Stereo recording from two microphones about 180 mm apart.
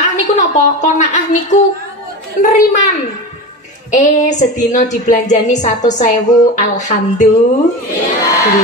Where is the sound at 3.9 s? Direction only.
40° left (ahead or behind).